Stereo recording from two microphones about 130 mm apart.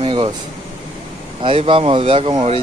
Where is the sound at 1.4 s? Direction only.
40° right (ahead or behind).